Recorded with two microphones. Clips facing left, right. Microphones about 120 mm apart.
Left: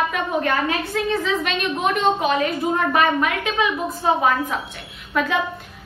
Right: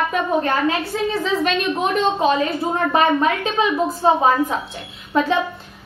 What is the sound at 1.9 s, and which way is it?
A woman's voice, 30° right (ahead or behind).